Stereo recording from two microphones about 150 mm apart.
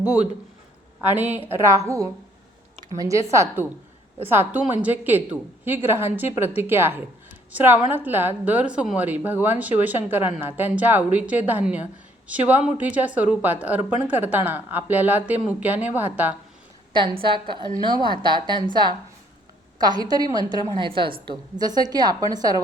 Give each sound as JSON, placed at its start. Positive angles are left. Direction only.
{"t": 0.0, "sound": "a woman's voice", "side_deg": -10}
{"t": 16.9, "sound": "a woman's voice", "side_deg": -30}